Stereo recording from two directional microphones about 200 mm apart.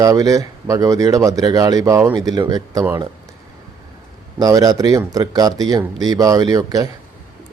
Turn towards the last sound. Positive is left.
turn(degrees=-20)  # may be behind; listen again after turning